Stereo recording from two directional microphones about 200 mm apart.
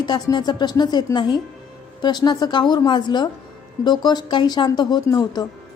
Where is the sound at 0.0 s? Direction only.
20° left (ahead or behind).